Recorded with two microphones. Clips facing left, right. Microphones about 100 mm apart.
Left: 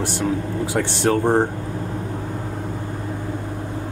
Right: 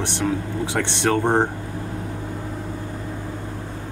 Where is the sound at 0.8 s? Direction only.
75° right (ahead or behind).